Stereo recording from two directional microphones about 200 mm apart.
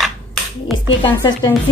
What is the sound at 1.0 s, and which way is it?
Speech, 20° left (ahead or behind).